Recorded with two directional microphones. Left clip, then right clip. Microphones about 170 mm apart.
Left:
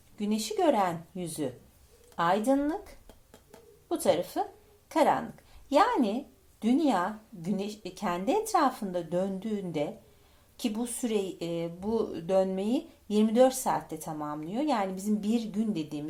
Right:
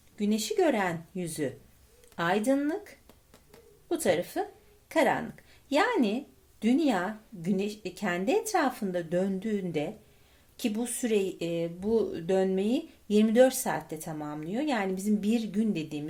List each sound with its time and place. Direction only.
0.2 s speech: 35° right (ahead or behind)
3.8 s speech: 35° right (ahead or behind)